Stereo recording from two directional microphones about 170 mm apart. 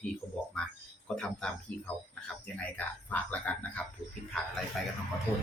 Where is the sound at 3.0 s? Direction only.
10° left (ahead or behind).